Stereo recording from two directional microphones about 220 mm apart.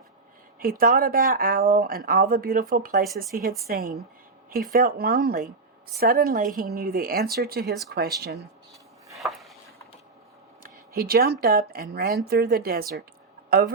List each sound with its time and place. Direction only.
0.6 s speech: 40° right (ahead or behind)
9.1 s a sound: centre (ahead or behind)
10.6 s speech: 40° right (ahead or behind)